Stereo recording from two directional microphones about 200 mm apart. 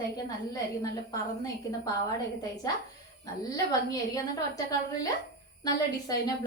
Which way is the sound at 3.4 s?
15° left (ahead or behind).